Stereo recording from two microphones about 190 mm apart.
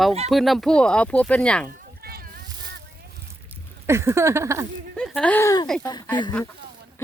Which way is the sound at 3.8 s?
15° right (ahead or behind).